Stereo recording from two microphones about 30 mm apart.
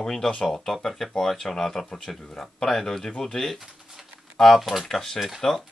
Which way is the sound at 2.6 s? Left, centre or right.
Centre.